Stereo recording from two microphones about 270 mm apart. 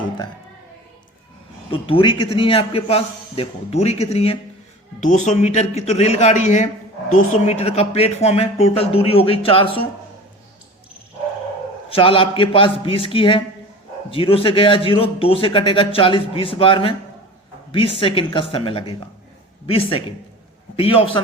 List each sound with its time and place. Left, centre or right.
1.7 s a man's voice: centre
11.9 s a man's voice: centre